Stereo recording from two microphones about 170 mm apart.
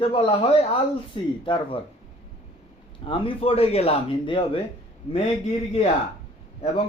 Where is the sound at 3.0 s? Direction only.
30° left (ahead or behind).